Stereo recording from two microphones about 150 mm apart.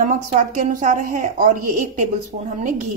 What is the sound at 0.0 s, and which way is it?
A woman's voice, 60° right (ahead or behind).